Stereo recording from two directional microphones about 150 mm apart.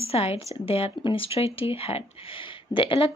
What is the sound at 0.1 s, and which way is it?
Speech, 40° left (ahead or behind).